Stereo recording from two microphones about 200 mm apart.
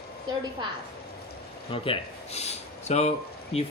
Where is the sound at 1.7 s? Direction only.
25° left (ahead or behind).